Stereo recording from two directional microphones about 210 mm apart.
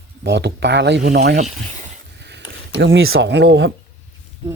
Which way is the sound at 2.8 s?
65° right (ahead or behind).